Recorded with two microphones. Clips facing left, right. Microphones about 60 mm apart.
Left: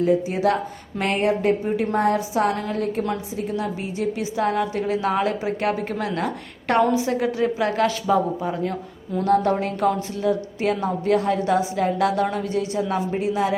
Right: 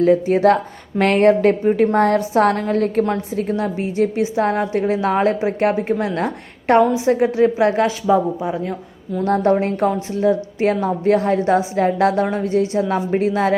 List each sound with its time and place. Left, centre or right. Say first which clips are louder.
0.0 s speech: right 6 dB; right
3.5 s a woman's voice: right 6 dB; right; by 8.5 s centre
9.2 s a woman's voice: right 3 dB; right